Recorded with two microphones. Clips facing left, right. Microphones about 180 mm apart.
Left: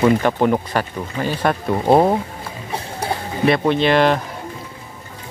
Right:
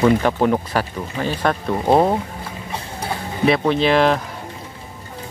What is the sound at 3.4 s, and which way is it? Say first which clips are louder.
Speech: even; centre (ahead or behind).